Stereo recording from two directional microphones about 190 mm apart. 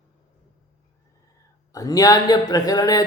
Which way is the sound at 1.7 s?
20° left (ahead or behind).